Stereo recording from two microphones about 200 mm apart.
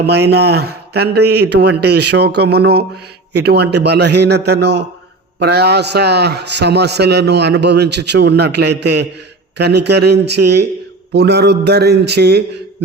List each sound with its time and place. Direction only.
0.0 s a man's voice: 55° right (ahead or behind)